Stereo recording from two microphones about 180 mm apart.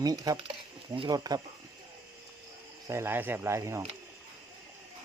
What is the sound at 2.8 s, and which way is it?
Speech, 15° right (ahead or behind).